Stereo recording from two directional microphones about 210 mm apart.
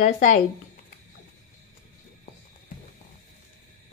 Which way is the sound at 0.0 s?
35° left (ahead or behind).